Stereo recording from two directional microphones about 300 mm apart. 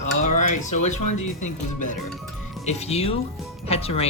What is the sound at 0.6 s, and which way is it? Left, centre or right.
Speech, left.